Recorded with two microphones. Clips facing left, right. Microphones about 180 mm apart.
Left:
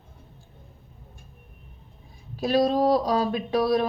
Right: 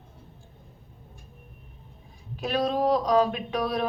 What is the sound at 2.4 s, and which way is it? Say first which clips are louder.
Speech: left 4 dB; 35° left (ahead or behind).